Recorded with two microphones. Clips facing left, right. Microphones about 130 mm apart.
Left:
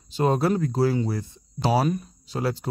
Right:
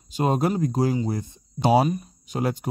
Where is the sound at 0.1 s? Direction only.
15° right (ahead or behind).